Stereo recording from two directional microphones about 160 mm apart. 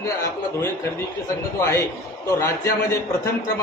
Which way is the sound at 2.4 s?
20° left (ahead or behind).